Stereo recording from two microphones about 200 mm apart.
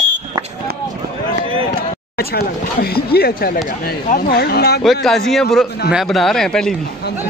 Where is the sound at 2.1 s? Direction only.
50° left (ahead or behind).